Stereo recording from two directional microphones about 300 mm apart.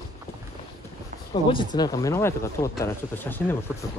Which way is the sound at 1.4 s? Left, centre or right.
Centre.